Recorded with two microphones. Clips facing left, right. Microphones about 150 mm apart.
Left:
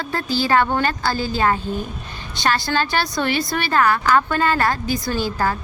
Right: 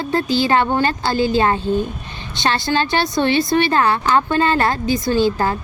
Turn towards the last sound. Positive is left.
turn(degrees=-20)  # may be behind; listen again after turning